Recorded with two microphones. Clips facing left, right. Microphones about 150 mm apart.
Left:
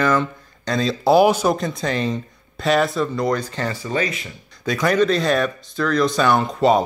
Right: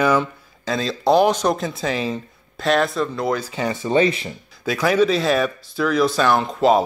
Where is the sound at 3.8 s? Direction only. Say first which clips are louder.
Right 10 dB; 25° right (ahead or behind).